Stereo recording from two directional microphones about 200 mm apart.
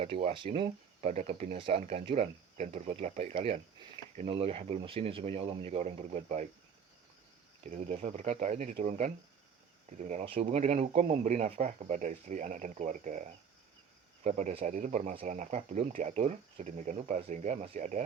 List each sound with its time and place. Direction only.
0.0 s speech: 30° right (ahead or behind)
7.6 s speech: 35° right (ahead or behind)